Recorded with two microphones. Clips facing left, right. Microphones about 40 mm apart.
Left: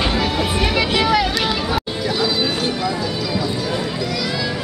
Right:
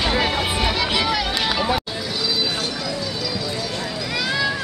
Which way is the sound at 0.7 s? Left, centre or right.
Centre.